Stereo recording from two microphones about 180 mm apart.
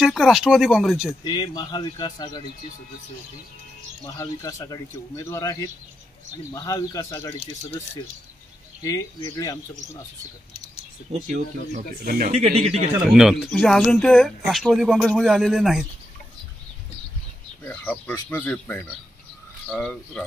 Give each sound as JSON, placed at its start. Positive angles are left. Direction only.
{"t": 0.0, "sound": "speech", "side_deg": 0}
{"t": 1.2, "sound": "speech", "side_deg": 25}
{"t": 4.0, "sound": "speech", "side_deg": 20}
{"t": 8.8, "sound": "speech", "side_deg": 15}
{"t": 11.1, "sound": "speech", "side_deg": -40}
{"t": 12.0, "sound": "speech", "side_deg": -60}
{"t": 12.3, "sound": "speech", "side_deg": -35}
{"t": 13.0, "sound": "speech", "side_deg": -5}
{"t": 17.6, "sound": "speech", "side_deg": 10}